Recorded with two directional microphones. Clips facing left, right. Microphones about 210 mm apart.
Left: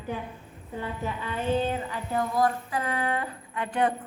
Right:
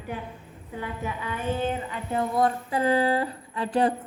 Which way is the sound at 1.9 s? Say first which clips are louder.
Right 1 dB; 25° right (ahead or behind).